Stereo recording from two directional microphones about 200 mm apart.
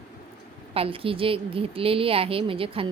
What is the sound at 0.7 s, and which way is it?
A woman's voice, 25° right (ahead or behind).